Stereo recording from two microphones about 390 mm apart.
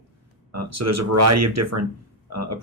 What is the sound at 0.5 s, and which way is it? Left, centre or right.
Speech, right.